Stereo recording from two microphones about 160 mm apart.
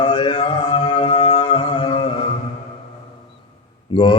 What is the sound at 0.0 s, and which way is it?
Music, 30° left (ahead or behind).